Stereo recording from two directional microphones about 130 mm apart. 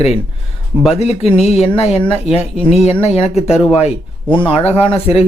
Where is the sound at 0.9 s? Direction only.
55° left (ahead or behind).